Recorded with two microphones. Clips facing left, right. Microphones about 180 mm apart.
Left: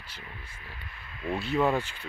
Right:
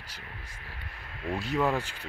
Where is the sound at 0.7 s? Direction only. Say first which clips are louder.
Right 2 dB; 70° right (ahead or behind).